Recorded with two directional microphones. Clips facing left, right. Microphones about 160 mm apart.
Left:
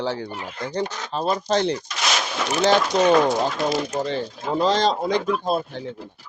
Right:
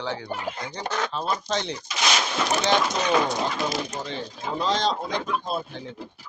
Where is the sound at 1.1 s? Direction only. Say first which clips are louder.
Left 5 dB; 45° left (ahead or behind).